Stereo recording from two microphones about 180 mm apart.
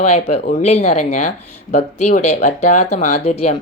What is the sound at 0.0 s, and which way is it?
Speech, 35° left (ahead or behind).